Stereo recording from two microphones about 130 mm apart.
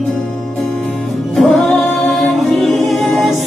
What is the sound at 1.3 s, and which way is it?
Music, centre (ahead or behind).